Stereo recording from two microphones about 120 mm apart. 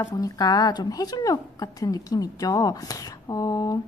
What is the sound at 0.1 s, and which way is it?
A woman's voice, 30° left (ahead or behind).